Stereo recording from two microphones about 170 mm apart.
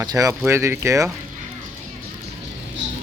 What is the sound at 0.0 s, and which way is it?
Speech, 20° right (ahead or behind).